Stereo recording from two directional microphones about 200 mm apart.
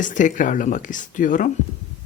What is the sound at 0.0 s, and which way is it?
Speech, 40° left (ahead or behind).